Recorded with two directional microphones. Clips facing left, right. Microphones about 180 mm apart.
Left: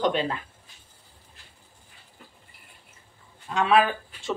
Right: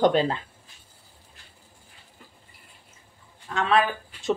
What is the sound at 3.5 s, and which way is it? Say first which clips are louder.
Speech: left 2 dB; 10° left (ahead or behind).